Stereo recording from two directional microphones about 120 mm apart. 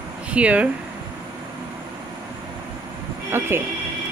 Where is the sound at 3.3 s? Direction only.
20° right (ahead or behind).